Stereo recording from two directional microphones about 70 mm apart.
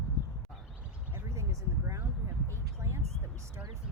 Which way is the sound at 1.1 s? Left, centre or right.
Right.